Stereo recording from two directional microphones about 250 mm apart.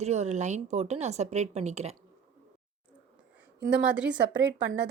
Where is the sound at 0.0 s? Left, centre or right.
Right.